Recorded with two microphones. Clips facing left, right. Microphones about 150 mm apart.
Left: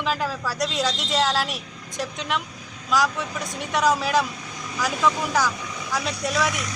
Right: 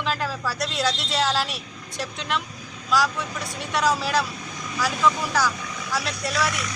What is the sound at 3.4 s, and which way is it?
Speech, 15° left (ahead or behind).